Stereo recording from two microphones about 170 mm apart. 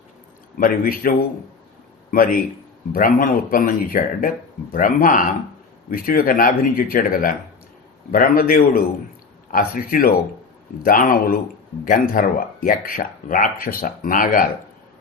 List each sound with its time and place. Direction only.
0.6 s a man's voice: 55° left (ahead or behind)